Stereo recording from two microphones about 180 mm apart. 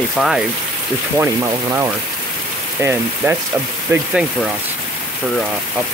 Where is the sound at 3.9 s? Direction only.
15° right (ahead or behind).